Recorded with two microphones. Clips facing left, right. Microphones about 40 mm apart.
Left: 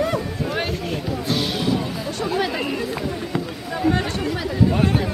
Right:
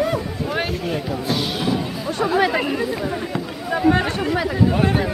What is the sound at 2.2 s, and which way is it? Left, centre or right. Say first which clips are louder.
Speech: right 5 dB; centre.